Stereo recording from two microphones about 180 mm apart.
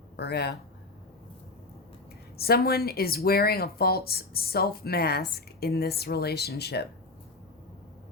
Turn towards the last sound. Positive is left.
turn(degrees=65)  # may be behind; listen again after turning